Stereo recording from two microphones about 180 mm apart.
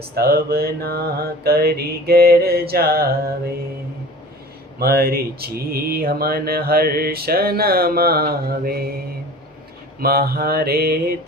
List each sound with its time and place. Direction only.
0.1 s speech: 60° right (ahead or behind)
4.8 s speech: 60° right (ahead or behind)
10.0 s speech: 60° right (ahead or behind)